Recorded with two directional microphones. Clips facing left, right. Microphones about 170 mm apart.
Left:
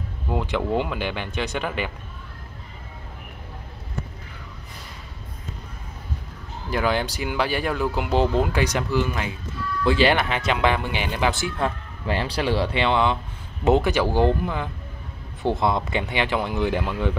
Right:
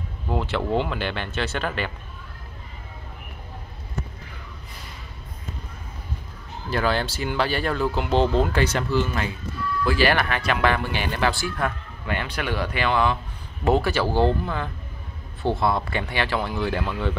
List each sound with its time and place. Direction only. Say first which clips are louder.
0.3 s speech: even; 10° left (ahead or behind)
6.7 s speech: even; 15° left (ahead or behind)